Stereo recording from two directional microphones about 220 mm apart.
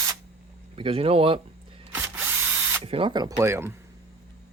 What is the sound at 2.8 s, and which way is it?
Speech, 25° right (ahead or behind).